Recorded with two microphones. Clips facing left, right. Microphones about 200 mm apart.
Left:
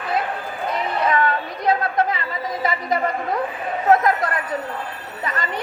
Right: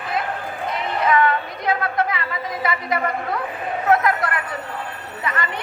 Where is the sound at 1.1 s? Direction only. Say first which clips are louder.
Right 2 dB; 35° left (ahead or behind).